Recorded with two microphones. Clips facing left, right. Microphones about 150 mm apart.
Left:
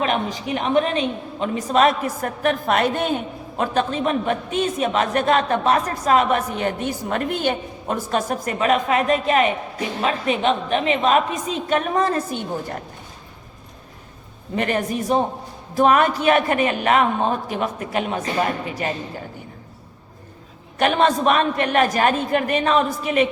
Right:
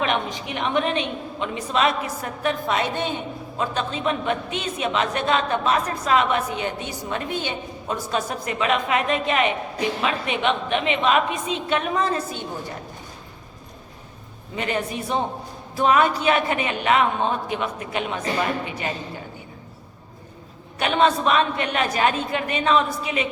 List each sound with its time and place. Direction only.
0.0 s a woman's voice: 35° left (ahead or behind)
14.5 s speech: 50° left (ahead or behind)
20.7 s speech: 45° left (ahead or behind)